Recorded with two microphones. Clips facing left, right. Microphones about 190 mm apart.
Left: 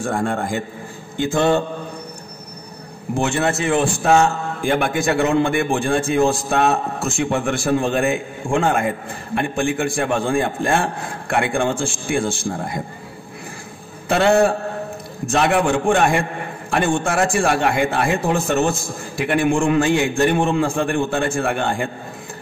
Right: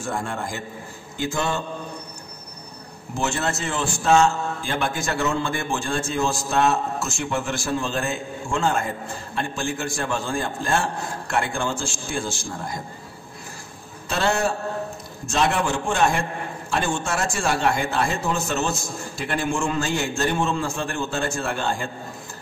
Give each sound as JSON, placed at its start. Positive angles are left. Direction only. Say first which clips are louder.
{"t": 0.0, "sound": "a man's voice", "louder": "left 6 dB", "side_deg": 55}
{"t": 3.2, "sound": "a man's voice", "louder": "left 6 dB", "side_deg": 60}
{"t": 14.0, "sound": "a man's voice", "louder": "left 8 dB", "side_deg": 60}